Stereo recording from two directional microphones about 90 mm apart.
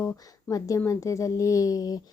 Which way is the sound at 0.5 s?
25° left (ahead or behind).